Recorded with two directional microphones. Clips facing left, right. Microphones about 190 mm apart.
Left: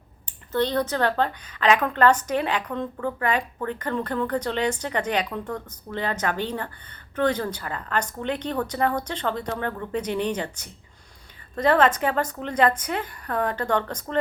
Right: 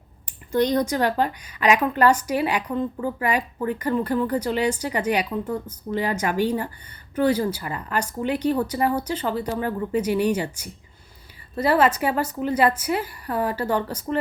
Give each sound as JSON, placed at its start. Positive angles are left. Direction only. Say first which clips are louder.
{"t": 0.5, "sound": "a woman's voice", "louder": "right 3 dB", "side_deg": -15}